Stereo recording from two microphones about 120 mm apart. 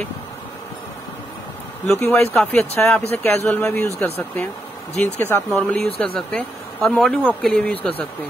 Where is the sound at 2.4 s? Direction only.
15° left (ahead or behind).